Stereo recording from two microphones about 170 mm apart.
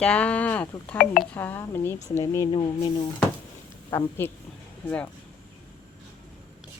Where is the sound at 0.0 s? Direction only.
5° left (ahead or behind); by 2.9 s 25° left (ahead or behind).